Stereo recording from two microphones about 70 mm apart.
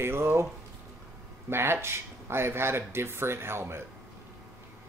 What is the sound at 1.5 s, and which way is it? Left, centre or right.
Speech, right.